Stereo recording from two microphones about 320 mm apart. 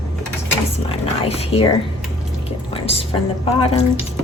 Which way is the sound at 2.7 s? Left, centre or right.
Centre.